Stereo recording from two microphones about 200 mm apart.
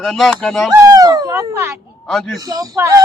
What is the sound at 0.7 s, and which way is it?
Speech, 15° right (ahead or behind).